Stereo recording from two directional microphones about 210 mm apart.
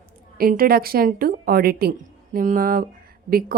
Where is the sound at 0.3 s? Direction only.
45° right (ahead or behind).